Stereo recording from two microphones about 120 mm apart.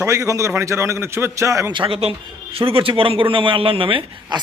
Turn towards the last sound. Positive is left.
turn(degrees=-45)  # may be behind; listen again after turning